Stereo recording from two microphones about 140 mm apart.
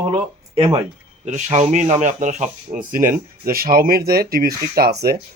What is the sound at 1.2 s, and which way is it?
Speech, 60° right (ahead or behind).